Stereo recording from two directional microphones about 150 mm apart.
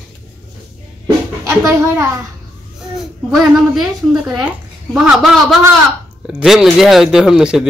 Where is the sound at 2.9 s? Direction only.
Centre (ahead or behind).